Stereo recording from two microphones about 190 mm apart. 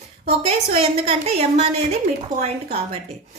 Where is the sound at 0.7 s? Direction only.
30° right (ahead or behind).